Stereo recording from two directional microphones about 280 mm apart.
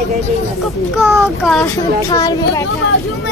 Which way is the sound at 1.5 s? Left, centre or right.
Centre.